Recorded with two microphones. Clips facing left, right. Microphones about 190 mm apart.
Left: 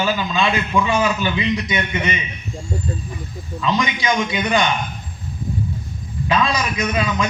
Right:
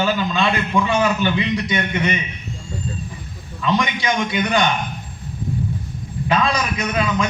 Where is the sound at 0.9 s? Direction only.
60° right (ahead or behind).